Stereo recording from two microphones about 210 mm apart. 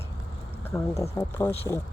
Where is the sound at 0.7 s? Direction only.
15° left (ahead or behind).